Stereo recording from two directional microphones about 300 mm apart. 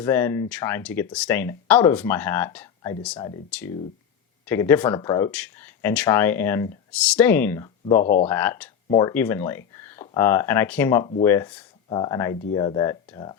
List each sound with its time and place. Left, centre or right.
0.0 s speech: centre
7.9 s speech: left
8.3 s speech: centre